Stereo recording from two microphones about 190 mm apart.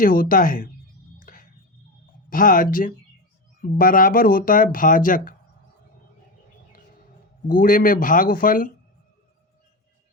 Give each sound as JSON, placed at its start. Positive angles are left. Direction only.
{"t": 0.0, "sound": "speech", "side_deg": 50}
{"t": 1.2, "sound": "a sound", "side_deg": 45}
{"t": 2.3, "sound": "speech", "side_deg": 45}
{"t": 7.4, "sound": "speech", "side_deg": 45}